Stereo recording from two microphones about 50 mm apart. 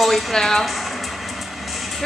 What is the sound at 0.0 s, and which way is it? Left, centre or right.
Speech, centre.